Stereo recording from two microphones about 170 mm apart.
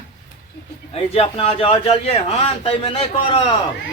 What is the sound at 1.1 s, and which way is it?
Speech, 35° left (ahead or behind).